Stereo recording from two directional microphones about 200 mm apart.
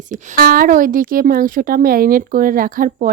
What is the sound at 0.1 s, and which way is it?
A woman's voice, 45° right (ahead or behind).